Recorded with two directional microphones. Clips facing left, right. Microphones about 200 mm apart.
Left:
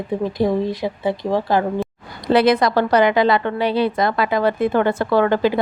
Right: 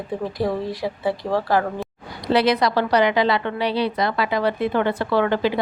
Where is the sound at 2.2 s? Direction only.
50° left (ahead or behind).